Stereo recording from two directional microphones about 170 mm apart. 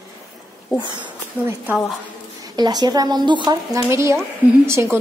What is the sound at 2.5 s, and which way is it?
A woman's voice, 25° right (ahead or behind).